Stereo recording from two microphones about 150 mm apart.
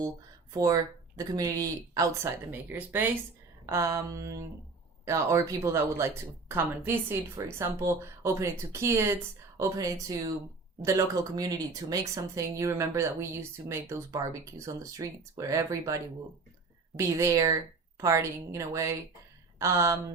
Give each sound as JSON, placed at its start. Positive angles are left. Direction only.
{"t": 0.5, "sound": "a woman's voice", "side_deg": -25}